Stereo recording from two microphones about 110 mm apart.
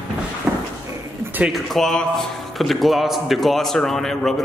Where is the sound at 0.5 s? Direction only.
25° right (ahead or behind).